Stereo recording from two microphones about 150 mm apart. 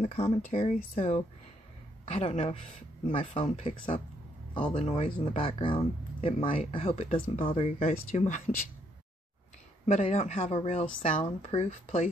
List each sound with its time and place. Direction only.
0.0 s a woman's voice: 45° left (ahead or behind)
9.8 s a woman's voice: 45° left (ahead or behind)
11.6 s a woman's voice: 45° left (ahead or behind)